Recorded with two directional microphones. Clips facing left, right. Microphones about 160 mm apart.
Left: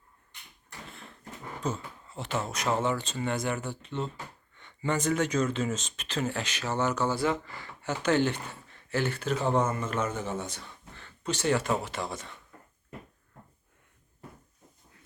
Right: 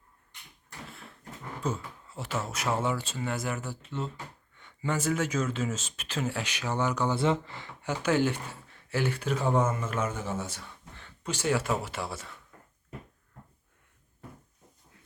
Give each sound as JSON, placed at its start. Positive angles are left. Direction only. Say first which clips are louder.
{"t": 0.9, "sound": "a sound", "louder": "even", "side_deg": -5}
{"t": 1.6, "sound": "speech", "louder": "even", "side_deg": -5}
{"t": 7.2, "sound": "speech", "louder": "right 2 dB", "side_deg": -25}